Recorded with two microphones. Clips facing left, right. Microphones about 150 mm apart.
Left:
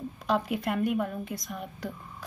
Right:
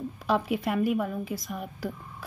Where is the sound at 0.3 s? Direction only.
Centre (ahead or behind).